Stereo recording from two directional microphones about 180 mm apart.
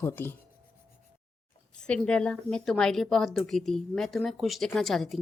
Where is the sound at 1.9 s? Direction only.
5° left (ahead or behind).